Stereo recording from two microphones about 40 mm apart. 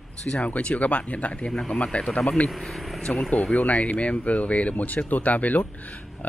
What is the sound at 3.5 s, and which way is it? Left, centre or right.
Speech, left.